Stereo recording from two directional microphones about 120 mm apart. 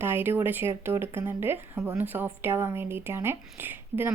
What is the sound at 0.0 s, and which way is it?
Speech, 20° right (ahead or behind).